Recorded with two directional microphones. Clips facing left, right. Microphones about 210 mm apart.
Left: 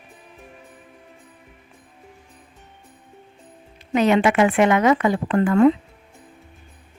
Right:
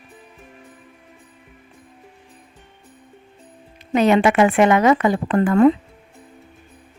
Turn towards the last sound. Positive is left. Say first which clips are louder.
# right 1 dB
turn(degrees=-40)  # may be behind; listen again after turning